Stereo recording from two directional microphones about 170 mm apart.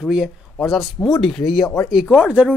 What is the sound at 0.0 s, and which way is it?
Speech, centre (ahead or behind).